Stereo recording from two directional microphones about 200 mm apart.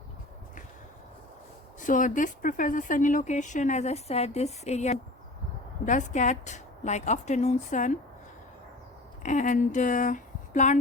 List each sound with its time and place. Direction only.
1.8 s speech: 40° left (ahead or behind)
9.2 s speech: 40° left (ahead or behind)